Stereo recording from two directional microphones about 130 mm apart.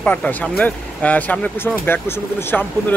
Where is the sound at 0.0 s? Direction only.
10° left (ahead or behind).